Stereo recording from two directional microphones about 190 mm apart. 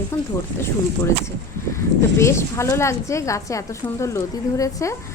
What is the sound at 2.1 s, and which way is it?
A woman's voice, 15° left (ahead or behind).